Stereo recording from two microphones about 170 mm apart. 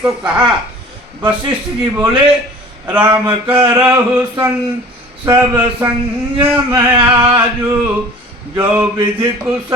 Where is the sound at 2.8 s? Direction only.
10° right (ahead or behind).